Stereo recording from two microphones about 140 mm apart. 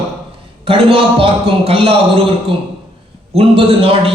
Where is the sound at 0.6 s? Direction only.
40° right (ahead or behind).